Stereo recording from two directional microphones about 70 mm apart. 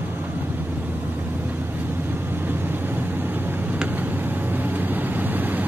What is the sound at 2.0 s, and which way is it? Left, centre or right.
Vehicle, right.